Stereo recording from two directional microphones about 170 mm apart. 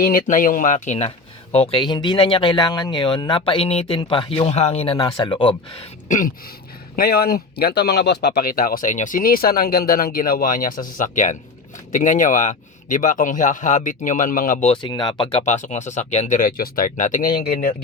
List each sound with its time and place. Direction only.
0.0 s speech: 55° left (ahead or behind); by 4.9 s 35° left (ahead or behind)
4.9 s speech: 25° left (ahead or behind)
6.1 s speech: 50° left (ahead or behind)
6.9 s speech: 60° left (ahead or behind)
14.7 s speech: 25° left (ahead or behind); by 17.7 s 55° left (ahead or behind)